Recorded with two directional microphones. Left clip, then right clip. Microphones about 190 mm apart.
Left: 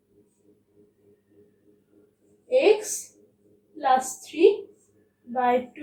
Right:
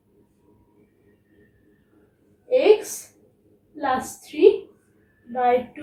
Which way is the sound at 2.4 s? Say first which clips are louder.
Right 3 dB; 15° right (ahead or behind).